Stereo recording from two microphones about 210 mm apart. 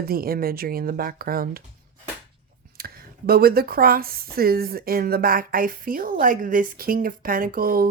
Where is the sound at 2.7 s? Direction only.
45° right (ahead or behind).